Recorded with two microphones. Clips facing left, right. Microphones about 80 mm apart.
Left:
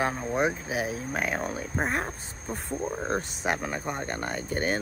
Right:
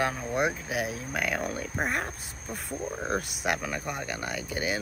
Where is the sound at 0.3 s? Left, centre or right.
Centre.